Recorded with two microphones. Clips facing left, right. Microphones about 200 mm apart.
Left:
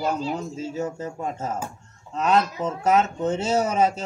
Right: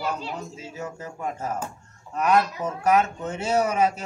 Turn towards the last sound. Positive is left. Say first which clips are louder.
# left 1 dB
turn(degrees=25)  # may be behind; listen again after turning